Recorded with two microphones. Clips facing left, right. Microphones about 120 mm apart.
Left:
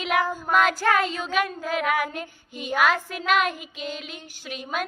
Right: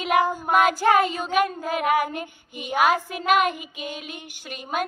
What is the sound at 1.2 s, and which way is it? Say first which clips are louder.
Speech: right 3 dB; 50° right (ahead or behind).